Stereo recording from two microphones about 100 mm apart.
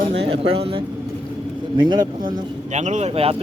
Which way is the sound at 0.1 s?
85° right.